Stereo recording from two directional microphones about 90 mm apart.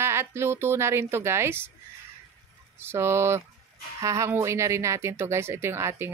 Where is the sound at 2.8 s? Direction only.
30° right (ahead or behind).